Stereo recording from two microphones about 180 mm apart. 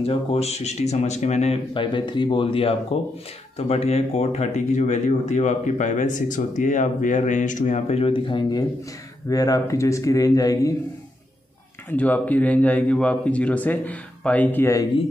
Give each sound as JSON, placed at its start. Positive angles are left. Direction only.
{"t": 0.0, "sound": "speech", "side_deg": 35}
{"t": 11.9, "sound": "speech", "side_deg": 10}